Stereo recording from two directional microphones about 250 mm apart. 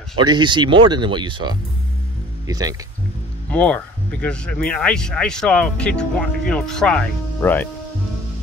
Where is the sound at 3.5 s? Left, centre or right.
Centre.